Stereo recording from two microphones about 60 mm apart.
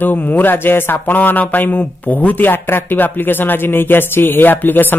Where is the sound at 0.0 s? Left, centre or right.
Left.